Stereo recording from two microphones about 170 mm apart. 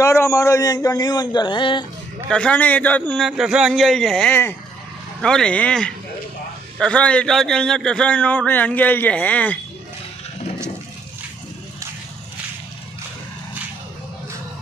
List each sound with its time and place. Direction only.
0.0 s a man's voice: 15° left (ahead or behind)
2.2 s a man's voice: 5° left (ahead or behind)
3.3 s a man's voice: 5° right (ahead or behind)